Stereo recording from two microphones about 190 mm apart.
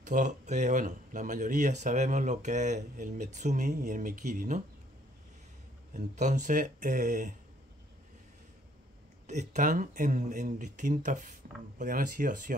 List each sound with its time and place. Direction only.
0.0 s speech: 40° right (ahead or behind)
5.9 s speech: 40° right (ahead or behind)
9.3 s speech: 40° right (ahead or behind)